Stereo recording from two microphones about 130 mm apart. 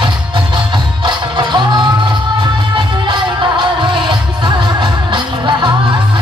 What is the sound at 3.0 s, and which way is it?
Music, 40° right (ahead or behind).